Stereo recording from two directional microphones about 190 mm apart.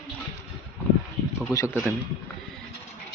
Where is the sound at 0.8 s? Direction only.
10° left (ahead or behind).